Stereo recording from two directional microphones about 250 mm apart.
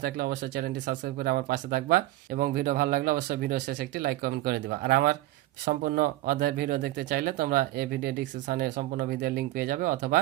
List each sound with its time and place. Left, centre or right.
0.0 s speech: right